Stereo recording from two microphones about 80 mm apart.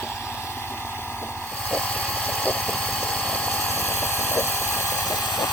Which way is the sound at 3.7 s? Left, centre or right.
Left.